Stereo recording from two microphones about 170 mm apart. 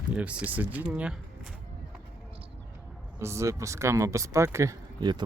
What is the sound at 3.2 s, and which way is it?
Speech, 15° right (ahead or behind).